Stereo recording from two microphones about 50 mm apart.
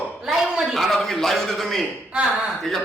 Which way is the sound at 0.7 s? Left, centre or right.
Centre.